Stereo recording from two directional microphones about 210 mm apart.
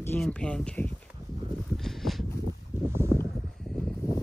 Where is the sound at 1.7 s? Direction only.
Centre (ahead or behind).